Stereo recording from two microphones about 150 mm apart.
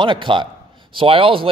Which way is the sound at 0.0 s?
35° right (ahead or behind).